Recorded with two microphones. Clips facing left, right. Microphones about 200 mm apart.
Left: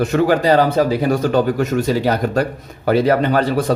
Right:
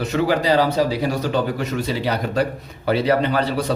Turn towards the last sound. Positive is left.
turn(degrees=50)  # may be behind; listen again after turning